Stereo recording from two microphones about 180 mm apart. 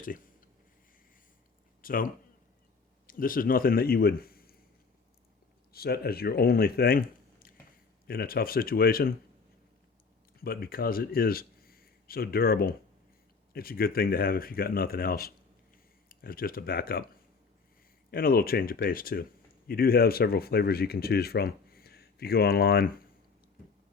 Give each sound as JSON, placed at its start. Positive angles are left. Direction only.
{"t": 1.8, "sound": "a man's voice", "side_deg": 50}
{"t": 5.7, "sound": "speech", "side_deg": 60}
{"t": 10.4, "sound": "speech", "side_deg": 55}
{"t": 18.1, "sound": "speech", "side_deg": 55}